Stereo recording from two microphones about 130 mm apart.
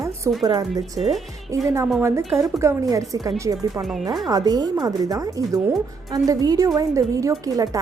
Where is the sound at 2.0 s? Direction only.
20° right (ahead or behind).